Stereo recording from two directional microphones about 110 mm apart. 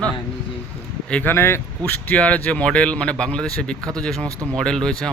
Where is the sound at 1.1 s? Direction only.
15° left (ahead or behind).